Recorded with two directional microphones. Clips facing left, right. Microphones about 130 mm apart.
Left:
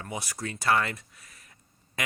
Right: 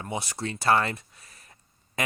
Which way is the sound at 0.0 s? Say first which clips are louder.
Right 3 dB; 25° right (ahead or behind).